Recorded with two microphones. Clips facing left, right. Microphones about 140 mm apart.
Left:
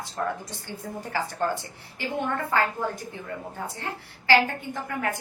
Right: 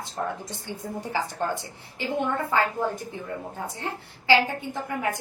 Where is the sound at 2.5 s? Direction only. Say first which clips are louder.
Right 1 dB; 20° right (ahead or behind).